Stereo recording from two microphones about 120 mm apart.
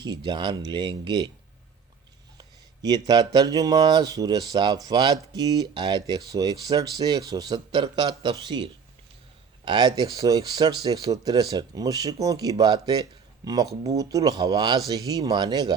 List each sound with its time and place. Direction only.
0.0 s speech: 35° right (ahead or behind)
2.4 s speech: 35° right (ahead or behind)